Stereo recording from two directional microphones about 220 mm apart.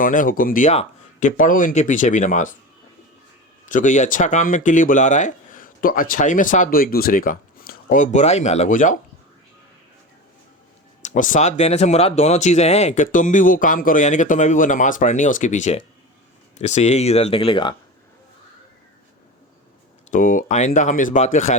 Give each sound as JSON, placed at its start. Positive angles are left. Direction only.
{"t": 0.0, "sound": "speech", "side_deg": 40}
{"t": 3.7, "sound": "speech", "side_deg": 35}
{"t": 11.0, "sound": "speech", "side_deg": 35}
{"t": 20.1, "sound": "speech", "side_deg": 40}